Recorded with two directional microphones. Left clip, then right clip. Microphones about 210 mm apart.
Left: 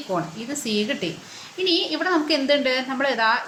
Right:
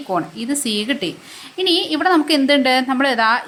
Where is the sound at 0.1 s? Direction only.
40° right (ahead or behind).